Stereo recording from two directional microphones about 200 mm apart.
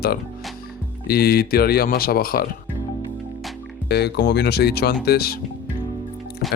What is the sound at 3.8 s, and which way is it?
Speech, 55° left (ahead or behind).